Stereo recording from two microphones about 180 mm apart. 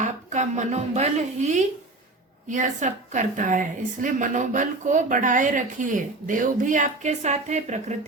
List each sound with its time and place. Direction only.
0.0 s a woman's voice: 40° right (ahead or behind)